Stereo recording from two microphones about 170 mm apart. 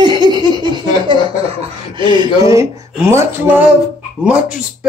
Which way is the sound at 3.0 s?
15° right (ahead or behind).